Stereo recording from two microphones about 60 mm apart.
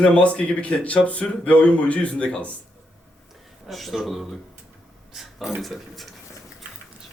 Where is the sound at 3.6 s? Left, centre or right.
Centre.